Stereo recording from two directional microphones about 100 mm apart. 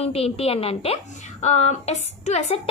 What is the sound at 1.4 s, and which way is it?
A woman's voice, 90° left.